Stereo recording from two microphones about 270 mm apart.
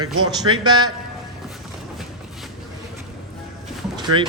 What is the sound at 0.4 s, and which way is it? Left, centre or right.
Speech, centre.